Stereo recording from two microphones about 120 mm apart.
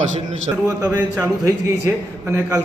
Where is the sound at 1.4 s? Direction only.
25° right (ahead or behind).